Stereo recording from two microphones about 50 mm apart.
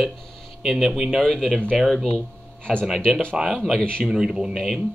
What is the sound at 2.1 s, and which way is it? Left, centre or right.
Speech, centre.